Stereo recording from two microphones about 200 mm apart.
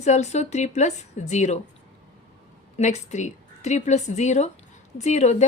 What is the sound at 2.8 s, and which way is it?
A woman's voice, 35° left (ahead or behind).